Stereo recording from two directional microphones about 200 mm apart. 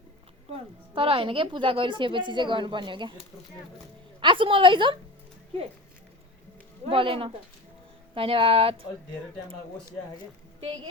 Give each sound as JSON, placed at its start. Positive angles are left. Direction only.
{"t": 0.5, "sound": "a woman's voice", "side_deg": -25}
{"t": 4.2, "sound": "a woman's voice", "side_deg": -25}
{"t": 6.8, "sound": "a woman's voice", "side_deg": -25}